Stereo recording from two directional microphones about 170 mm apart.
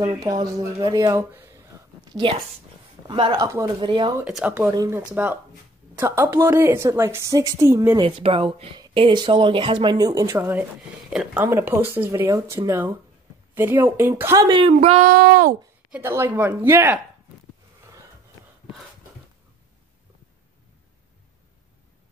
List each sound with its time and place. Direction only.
0.0 s speech: 30° right (ahead or behind)
3.1 s speech: 25° right (ahead or behind)
4.3 s speech: centre (ahead or behind)
4.6 s a woman's voice: 15° right (ahead or behind)
8.0 s a woman's voice: 35° right (ahead or behind)
14.8 s child singing: 45° right (ahead or behind)
15.1 s speech: 60° right (ahead or behind)
15.9 s a woman's voice: 15° right (ahead or behind)